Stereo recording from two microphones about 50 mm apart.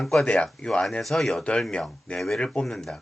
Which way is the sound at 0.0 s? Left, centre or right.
Centre.